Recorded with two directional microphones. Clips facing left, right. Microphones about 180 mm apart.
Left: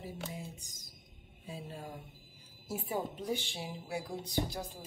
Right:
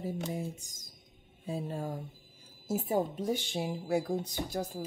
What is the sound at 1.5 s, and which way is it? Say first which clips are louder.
Speech: right 8 dB; 45° right (ahead or behind).